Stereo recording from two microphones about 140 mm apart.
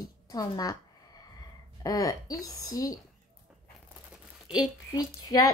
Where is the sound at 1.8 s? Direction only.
25° left (ahead or behind).